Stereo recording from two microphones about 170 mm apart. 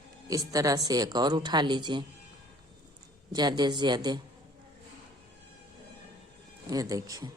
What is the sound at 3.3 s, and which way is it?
Speech, 25° right (ahead or behind).